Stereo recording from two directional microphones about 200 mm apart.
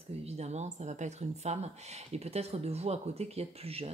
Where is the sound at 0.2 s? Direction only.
35° right (ahead or behind).